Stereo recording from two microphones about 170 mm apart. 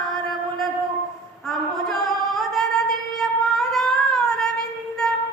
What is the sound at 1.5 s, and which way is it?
Singing, centre (ahead or behind).